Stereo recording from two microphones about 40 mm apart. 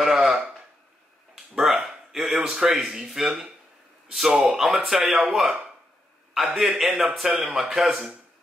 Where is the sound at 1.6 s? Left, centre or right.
Centre.